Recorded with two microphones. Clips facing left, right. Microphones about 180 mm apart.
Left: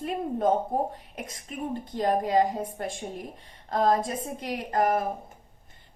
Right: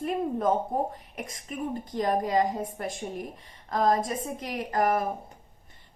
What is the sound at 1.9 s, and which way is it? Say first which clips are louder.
A woman's voice: left 2 dB; 30° left (ahead or behind).